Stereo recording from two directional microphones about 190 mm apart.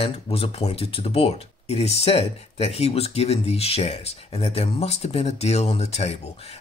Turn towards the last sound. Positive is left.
turn(degrees=35)  # may be behind; listen again after turning